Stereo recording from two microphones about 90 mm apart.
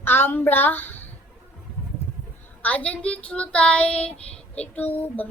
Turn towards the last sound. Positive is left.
turn(degrees=20)  # may be behind; listen again after turning